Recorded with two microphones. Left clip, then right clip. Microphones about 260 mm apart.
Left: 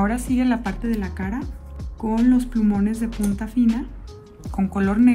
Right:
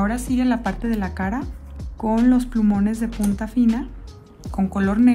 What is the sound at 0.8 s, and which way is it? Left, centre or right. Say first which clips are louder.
Speech: right 2 dB; centre.